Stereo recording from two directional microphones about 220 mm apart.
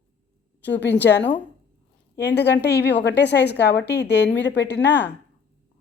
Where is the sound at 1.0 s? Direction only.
50° left (ahead or behind).